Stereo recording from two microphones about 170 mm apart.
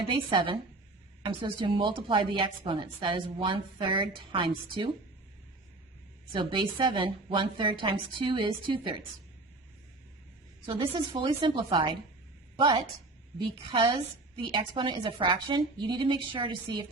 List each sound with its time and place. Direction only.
0.1 s a woman's voice: 30° right (ahead or behind)
6.3 s a woman's voice: 30° right (ahead or behind)
10.7 s a woman's voice: 30° right (ahead or behind)